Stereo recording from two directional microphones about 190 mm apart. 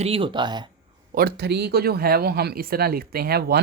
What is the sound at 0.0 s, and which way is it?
Speech, 30° right (ahead or behind).